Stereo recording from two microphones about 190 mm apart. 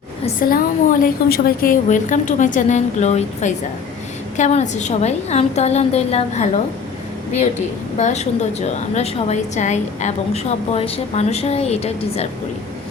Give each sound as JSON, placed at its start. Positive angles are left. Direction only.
{"t": 0.4, "sound": "a woman's voice", "side_deg": 50}
{"t": 7.9, "sound": "a woman's voice", "side_deg": 35}